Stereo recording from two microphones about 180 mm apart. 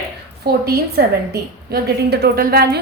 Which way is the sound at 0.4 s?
60° right (ahead or behind).